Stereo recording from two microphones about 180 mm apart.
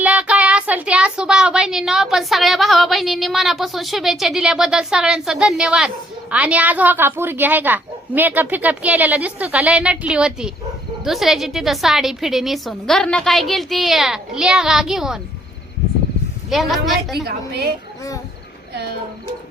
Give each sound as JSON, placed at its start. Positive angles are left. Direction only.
{"t": 0.0, "sound": "speech", "side_deg": -5}
{"t": 16.5, "sound": "speech", "side_deg": 0}
{"t": 17.2, "sound": "a woman's voice", "side_deg": -60}